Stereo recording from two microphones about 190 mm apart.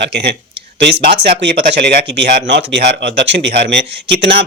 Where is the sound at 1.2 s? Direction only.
55° right (ahead or behind).